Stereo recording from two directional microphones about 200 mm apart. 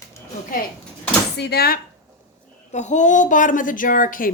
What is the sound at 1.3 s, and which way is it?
Speech, 55° left (ahead or behind).